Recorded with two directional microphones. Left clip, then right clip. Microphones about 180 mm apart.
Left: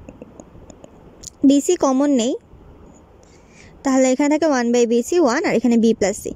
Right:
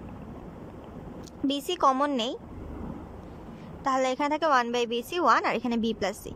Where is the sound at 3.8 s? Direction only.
35° left (ahead or behind).